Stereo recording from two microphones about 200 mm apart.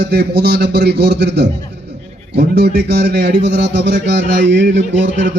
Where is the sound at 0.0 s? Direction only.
55° right (ahead or behind).